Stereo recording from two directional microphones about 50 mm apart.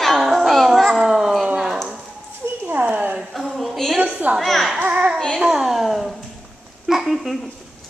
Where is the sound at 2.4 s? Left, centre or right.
Right.